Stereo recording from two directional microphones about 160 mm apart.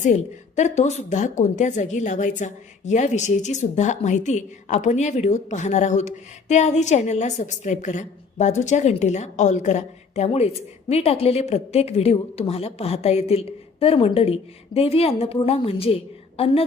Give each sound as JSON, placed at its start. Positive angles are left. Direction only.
{"t": 0.0, "sound": "a woman's voice", "side_deg": 45}